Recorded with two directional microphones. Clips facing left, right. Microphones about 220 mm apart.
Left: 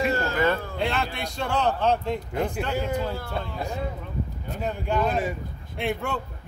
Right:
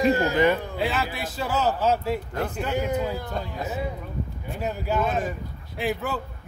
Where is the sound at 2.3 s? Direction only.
10° left (ahead or behind).